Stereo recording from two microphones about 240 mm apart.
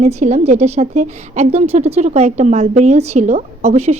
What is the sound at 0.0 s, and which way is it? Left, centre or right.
A woman's voice, right.